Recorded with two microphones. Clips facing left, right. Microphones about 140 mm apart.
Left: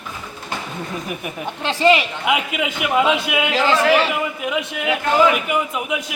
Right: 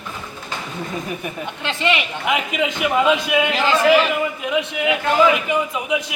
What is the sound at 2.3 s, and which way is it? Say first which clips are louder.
A man's voice: even; 10° left (ahead or behind).